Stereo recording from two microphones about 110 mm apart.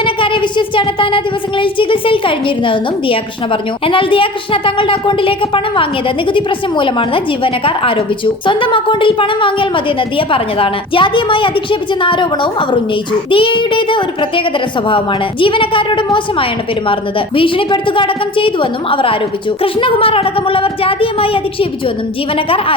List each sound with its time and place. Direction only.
0.0 s a woman's voice: 50° left (ahead or behind)